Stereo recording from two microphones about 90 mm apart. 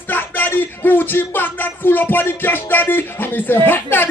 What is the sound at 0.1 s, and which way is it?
Music, 20° left (ahead or behind).